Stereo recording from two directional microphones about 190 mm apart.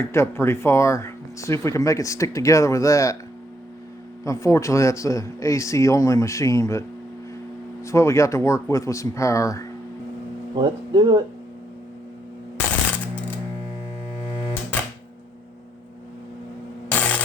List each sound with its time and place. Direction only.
0.0 s speech: 15° left (ahead or behind)
4.2 s speech: 15° left (ahead or behind)
10.5 s speech: 25° right (ahead or behind)
14.2 s music: 30° left (ahead or behind)
16.9 s a sound: 10° left (ahead or behind)